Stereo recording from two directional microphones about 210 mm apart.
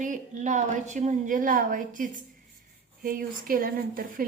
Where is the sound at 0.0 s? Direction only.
35° right (ahead or behind).